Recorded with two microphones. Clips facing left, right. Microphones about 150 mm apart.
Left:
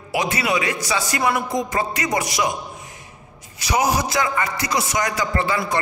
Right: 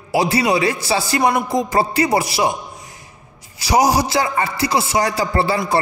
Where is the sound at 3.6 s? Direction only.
35° right (ahead or behind).